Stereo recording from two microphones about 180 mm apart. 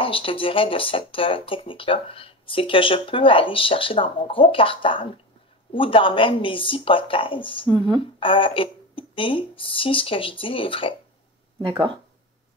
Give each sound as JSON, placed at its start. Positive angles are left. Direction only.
{"t": 0.0, "sound": "speech", "side_deg": 30}
{"t": 7.6, "sound": "speech", "side_deg": -25}
{"t": 8.0, "sound": "speech", "side_deg": 30}